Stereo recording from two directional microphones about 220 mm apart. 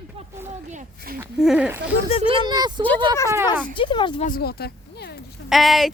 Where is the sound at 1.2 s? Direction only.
5° right (ahead or behind).